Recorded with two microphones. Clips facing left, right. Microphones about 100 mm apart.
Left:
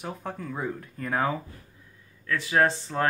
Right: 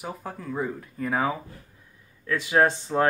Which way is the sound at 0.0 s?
5° right (ahead or behind).